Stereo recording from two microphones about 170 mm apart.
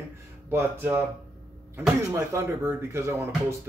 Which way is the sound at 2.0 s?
15° right (ahead or behind).